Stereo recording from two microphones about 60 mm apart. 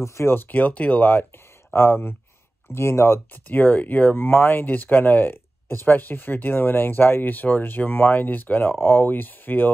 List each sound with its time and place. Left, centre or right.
0.0 s speech: left
3.4 s speech: left
4.3 s speech: left